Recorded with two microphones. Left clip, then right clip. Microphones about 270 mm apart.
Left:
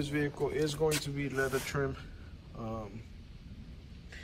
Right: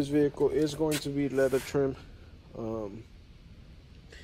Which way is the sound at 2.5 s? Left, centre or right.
Left.